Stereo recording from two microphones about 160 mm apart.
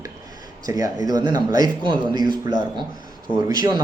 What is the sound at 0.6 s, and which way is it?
Speech, 20° right (ahead or behind).